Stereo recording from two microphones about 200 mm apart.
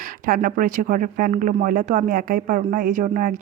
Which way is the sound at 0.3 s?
45° right (ahead or behind).